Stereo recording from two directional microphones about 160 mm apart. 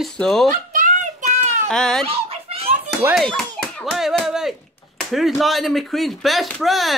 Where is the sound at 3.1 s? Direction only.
Centre (ahead or behind).